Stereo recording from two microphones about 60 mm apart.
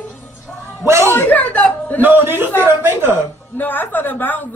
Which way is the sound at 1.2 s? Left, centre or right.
Left.